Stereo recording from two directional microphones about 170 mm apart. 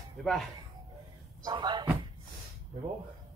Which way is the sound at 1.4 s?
25° right (ahead or behind).